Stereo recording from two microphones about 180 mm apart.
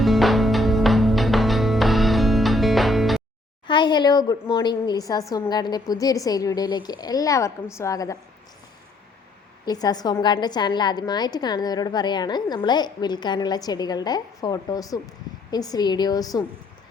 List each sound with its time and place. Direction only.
0.0 s music: centre (ahead or behind)
3.7 s a woman's voice: 25° left (ahead or behind)
9.6 s a woman's voice: 20° left (ahead or behind)